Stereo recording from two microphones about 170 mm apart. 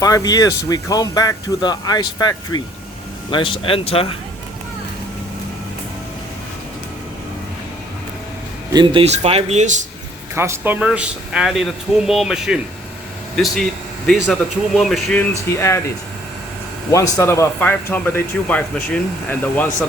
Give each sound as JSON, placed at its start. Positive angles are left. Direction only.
{"t": 0.0, "sound": "speech", "side_deg": 20}
{"t": 8.7, "sound": "speech", "side_deg": -30}
{"t": 10.3, "sound": "speech", "side_deg": -15}
{"t": 15.5, "sound": "speech", "side_deg": 15}
{"t": 16.9, "sound": "speech", "side_deg": 20}